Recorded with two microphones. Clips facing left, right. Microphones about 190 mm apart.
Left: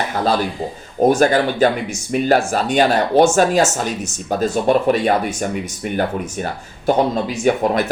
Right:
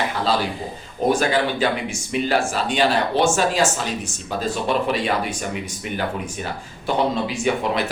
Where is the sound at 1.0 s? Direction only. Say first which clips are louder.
Left 5 dB; 45° left (ahead or behind).